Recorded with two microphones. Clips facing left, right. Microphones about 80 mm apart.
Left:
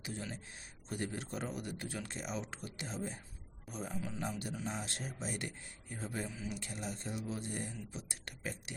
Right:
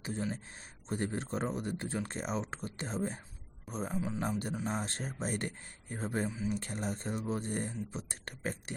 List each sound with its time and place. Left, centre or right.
0.0 s speech: right
3.9 s a man's voice: right
4.2 s speech: right